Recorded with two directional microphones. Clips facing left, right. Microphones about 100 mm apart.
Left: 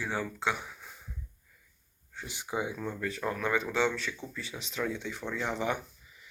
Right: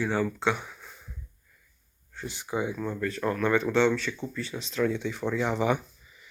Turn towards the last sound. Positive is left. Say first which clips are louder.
# right 1 dB
turn(degrees=0)  # may be behind; listen again after turning